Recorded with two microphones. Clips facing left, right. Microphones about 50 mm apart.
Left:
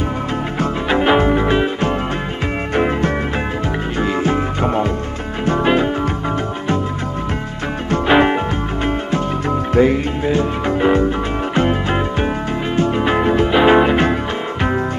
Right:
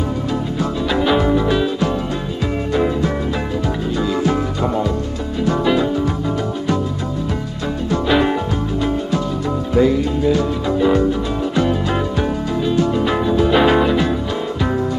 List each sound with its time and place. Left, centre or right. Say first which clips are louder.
0.6 s music: left 3 dB; left
7.9 s music: left 3 dB; left
9.8 s music: even; left